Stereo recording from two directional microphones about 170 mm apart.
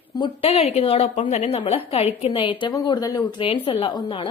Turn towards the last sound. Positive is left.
turn(degrees=30)  # may be behind; listen again after turning